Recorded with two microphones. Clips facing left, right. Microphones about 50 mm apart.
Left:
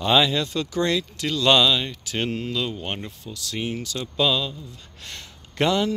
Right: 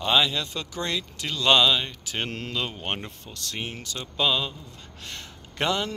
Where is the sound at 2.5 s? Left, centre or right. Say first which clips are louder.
Left 2 dB; right.